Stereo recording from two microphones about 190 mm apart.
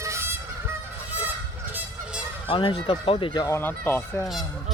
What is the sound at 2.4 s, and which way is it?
Speech, 25° left (ahead or behind).